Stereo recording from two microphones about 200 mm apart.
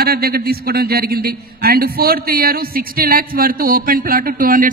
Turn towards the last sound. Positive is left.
turn(degrees=-45)  # may be behind; listen again after turning